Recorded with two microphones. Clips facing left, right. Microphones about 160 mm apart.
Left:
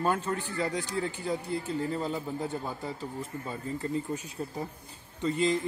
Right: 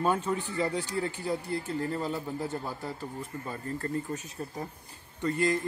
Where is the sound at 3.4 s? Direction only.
5° left (ahead or behind).